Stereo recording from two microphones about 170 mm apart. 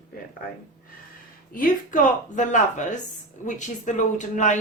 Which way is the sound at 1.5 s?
50° left (ahead or behind).